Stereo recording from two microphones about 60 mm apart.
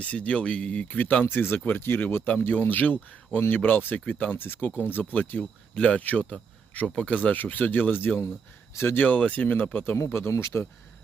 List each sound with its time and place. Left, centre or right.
0.0 s speech: left